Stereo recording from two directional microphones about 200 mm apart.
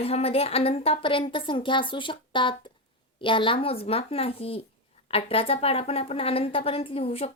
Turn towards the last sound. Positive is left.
turn(degrees=30)  # may be behind; listen again after turning